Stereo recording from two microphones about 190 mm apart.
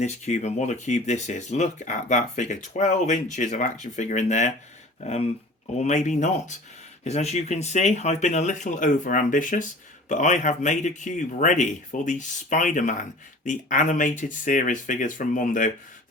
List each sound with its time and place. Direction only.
0.0 s speech: 35° left (ahead or behind)